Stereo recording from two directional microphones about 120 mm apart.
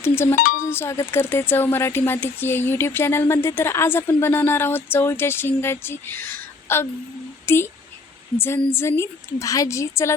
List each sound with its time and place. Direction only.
0.0 s speech: 20° left (ahead or behind)
8.7 s speech: 20° left (ahead or behind)